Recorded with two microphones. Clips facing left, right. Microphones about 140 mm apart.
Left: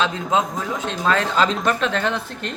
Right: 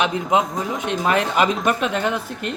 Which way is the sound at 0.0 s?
20° right (ahead or behind).